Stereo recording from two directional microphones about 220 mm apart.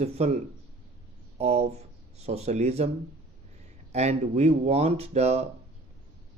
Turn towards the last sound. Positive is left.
turn(degrees=-30)  # may be behind; listen again after turning